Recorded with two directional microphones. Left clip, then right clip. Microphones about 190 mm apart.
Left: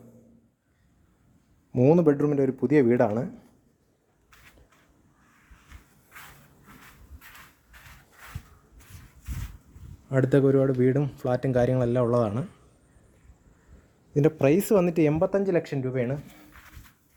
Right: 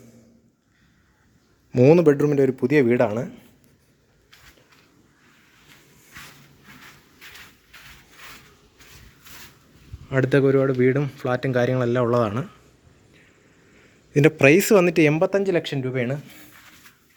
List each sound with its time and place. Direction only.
1.7 s speech: centre (ahead or behind)
2.6 s speech: 5° left (ahead or behind)
10.1 s speech: 25° left (ahead or behind); by 12.5 s 5° left (ahead or behind)
14.1 s speech: 5° right (ahead or behind)